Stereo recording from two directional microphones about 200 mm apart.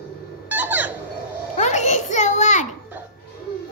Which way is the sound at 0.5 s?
10° right (ahead or behind).